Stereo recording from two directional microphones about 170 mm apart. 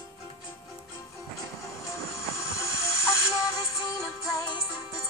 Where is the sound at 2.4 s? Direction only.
15° left (ahead or behind).